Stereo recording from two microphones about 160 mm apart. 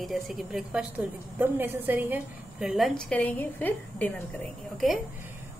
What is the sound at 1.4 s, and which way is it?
Speech, 15° right (ahead or behind).